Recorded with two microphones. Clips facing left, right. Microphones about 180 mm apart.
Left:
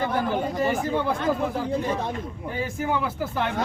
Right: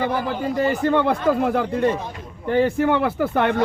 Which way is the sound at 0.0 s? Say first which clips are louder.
Right 2 dB; 70° right (ahead or behind).